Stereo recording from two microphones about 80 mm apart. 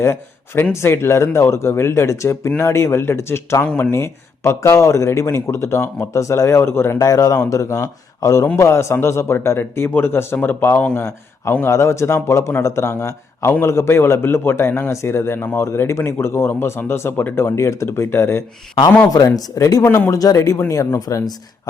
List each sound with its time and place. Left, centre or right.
0.0 s speech: left
7.0 s speech: left
19.1 s speech: left